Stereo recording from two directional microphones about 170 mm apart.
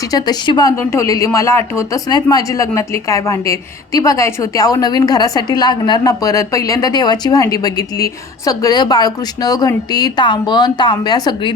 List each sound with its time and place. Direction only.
0.1 s speech: 25° left (ahead or behind)